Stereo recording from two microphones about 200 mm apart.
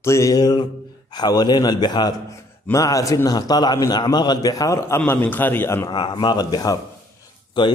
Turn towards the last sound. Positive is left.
turn(degrees=20)  # may be behind; listen again after turning